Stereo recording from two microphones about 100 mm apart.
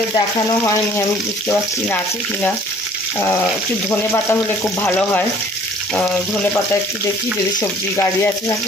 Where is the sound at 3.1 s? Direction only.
25° left (ahead or behind).